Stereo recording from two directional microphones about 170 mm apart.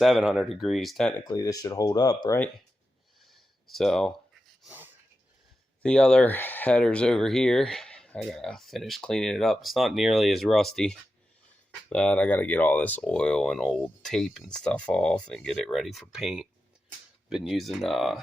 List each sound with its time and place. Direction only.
0.0 s speech: 5° right (ahead or behind)
1.2 s speech: 20° left (ahead or behind)
3.2 s a sound: centre (ahead or behind)
4.6 s dog: 10° right (ahead or behind)
5.8 s speech: 5° left (ahead or behind)